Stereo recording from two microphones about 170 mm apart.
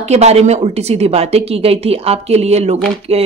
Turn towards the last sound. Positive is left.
turn(degrees=-35)  # may be behind; listen again after turning